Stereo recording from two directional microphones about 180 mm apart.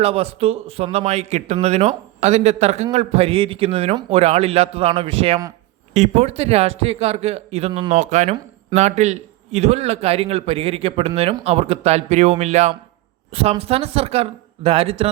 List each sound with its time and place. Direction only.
0.0 s a man's voice: 35° right (ahead or behind)
7.9 s a man's voice: 40° right (ahead or behind)